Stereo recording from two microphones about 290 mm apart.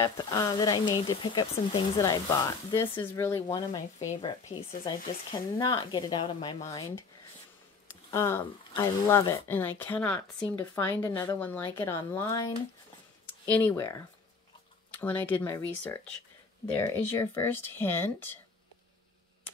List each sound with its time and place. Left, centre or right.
0.0 s speech: centre
7.9 s speech: centre